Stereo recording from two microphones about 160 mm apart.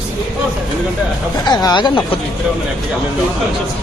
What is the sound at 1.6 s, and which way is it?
Speech, 30° left (ahead or behind).